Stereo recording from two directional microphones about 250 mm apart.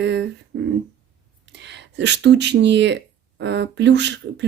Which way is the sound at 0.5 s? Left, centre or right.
Right.